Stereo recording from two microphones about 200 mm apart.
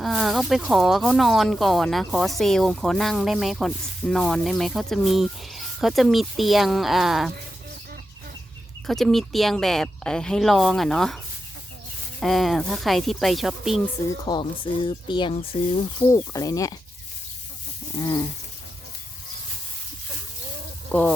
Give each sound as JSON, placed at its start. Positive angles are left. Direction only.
{"t": 0.0, "sound": "speech", "side_deg": 0}
{"t": 8.9, "sound": "speech", "side_deg": 0}
{"t": 12.2, "sound": "speech", "side_deg": 0}
{"t": 14.3, "sound": "speech", "side_deg": 25}
{"t": 17.9, "sound": "speech", "side_deg": 15}
{"t": 20.9, "sound": "speech", "side_deg": 5}